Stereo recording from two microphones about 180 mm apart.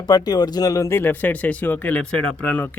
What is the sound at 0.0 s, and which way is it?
Speech, 20° left (ahead or behind).